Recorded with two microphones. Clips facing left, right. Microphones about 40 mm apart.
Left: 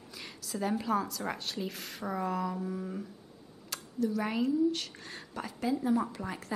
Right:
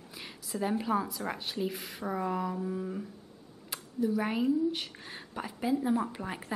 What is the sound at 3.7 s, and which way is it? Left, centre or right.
A woman's voice, centre.